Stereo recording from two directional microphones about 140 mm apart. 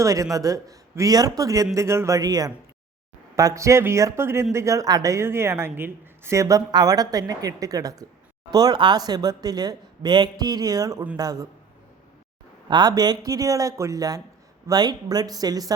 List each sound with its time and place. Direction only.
0.0 s speech: 25° right (ahead or behind)
12.6 s speech: 30° right (ahead or behind)